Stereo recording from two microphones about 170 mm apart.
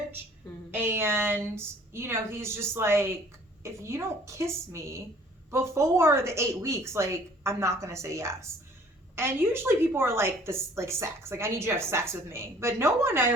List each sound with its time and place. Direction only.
0.7 s a woman's voice: 15° right (ahead or behind)